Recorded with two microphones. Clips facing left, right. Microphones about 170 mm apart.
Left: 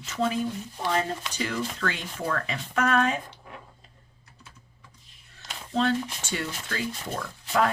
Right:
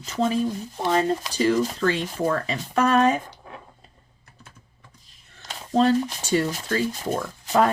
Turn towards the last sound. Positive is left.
turn(degrees=-40)  # may be behind; listen again after turning